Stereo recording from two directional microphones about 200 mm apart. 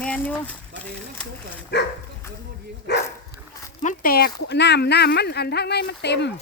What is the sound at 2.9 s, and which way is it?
Dog, 55° left (ahead or behind).